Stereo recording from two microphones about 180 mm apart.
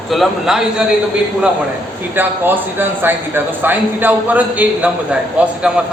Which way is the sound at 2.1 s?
10° right (ahead or behind).